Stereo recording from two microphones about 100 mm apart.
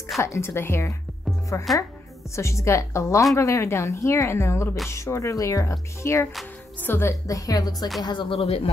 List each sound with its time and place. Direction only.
0.2 s speech: 30° left (ahead or behind)
8.0 s speech: 50° left (ahead or behind)
8.4 s speech: 80° left